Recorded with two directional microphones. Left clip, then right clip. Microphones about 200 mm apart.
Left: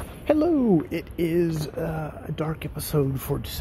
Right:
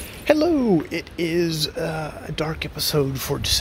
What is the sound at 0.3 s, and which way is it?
Speech, centre (ahead or behind).